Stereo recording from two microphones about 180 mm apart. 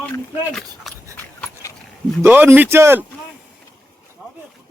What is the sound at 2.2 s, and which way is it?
Speech, 10° right (ahead or behind).